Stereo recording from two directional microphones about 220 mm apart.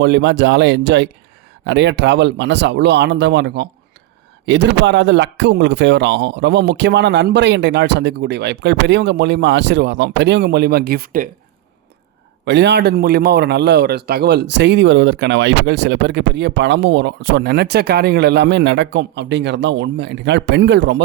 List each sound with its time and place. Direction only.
0.0 s a man's voice: 55° right (ahead or behind)
12.5 s a man's voice: 50° right (ahead or behind)